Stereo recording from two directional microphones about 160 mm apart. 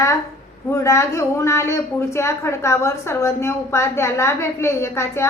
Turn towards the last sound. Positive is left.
turn(degrees=15)  # may be behind; listen again after turning